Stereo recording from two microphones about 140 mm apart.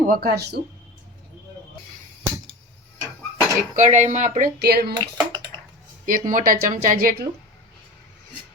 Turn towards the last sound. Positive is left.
turn(degrees=-70)  # may be behind; listen again after turning